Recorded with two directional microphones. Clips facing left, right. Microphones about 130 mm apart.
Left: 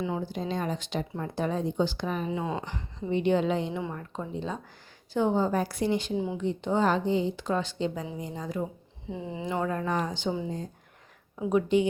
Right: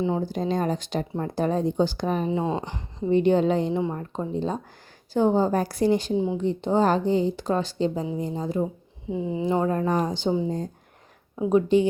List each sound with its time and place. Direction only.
0.2 s a woman's voice: 40° right (ahead or behind)
9.0 s a woman's voice: 20° right (ahead or behind); by 11.9 s 35° right (ahead or behind)